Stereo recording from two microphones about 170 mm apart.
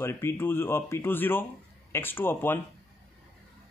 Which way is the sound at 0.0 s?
15° left (ahead or behind).